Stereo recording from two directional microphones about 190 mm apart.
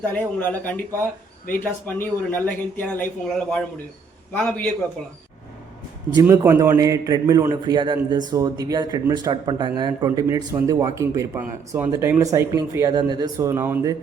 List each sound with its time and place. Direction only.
0.0 s a man's voice: 10° left (ahead or behind)
2.0 s a man's voice: 10° left (ahead or behind)
6.1 s speech: 15° right (ahead or behind)